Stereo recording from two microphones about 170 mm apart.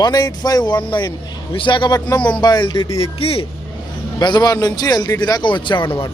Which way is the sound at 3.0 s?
35° left (ahead or behind).